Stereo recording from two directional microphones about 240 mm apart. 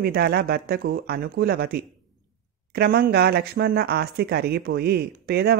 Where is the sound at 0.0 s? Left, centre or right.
Right.